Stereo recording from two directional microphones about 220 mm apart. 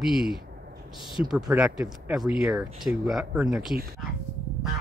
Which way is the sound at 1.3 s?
5° right (ahead or behind).